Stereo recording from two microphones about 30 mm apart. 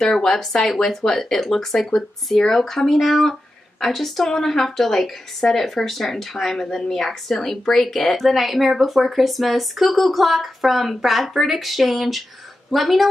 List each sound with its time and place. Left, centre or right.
0.0 s a woman's voice: centre
8.2 s speech: centre